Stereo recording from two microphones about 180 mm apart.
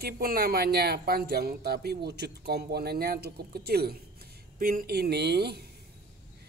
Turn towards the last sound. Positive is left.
turn(degrees=-65)  # may be behind; listen again after turning